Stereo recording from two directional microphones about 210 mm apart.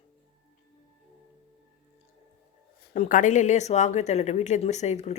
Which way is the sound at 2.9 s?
35° left (ahead or behind).